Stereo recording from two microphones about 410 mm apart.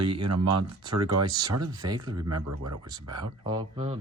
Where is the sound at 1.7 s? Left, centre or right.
Centre.